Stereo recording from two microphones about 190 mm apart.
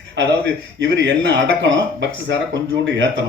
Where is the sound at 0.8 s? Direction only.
70° right (ahead or behind).